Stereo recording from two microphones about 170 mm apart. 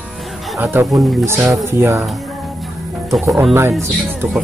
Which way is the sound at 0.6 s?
15° right (ahead or behind).